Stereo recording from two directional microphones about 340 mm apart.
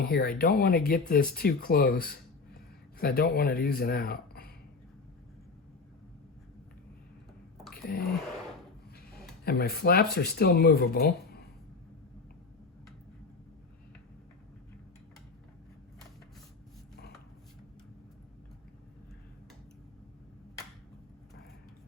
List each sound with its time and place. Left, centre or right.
0.0 s speech: left
7.9 s speech: left
9.4 s speech: left